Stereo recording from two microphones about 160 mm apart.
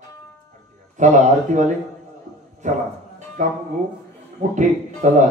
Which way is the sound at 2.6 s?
50° right (ahead or behind).